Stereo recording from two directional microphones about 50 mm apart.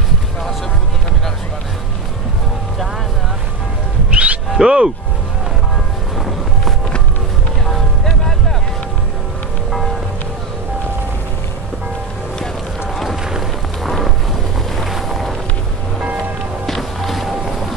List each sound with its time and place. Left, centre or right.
4.1 s music: right
4.6 s speech: centre
6.1 s music: centre
12.9 s run: centre
13.2 s run: centre
13.8 s music: centre
16.6 s music: centre